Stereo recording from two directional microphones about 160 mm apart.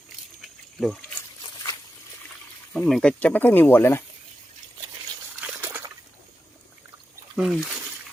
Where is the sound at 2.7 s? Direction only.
5° left (ahead or behind).